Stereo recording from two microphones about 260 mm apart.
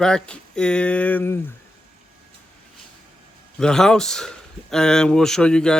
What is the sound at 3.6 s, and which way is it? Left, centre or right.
Speech, centre.